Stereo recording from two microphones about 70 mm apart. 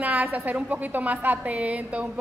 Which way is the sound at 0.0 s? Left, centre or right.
Right.